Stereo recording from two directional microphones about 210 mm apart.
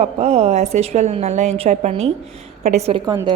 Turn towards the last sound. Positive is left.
turn(degrees=-20)  # may be behind; listen again after turning